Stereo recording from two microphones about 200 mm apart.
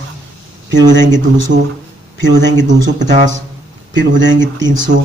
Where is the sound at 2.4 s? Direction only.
65° right (ahead or behind).